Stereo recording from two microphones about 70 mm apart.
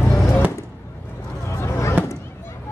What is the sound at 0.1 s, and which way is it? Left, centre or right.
Music, left.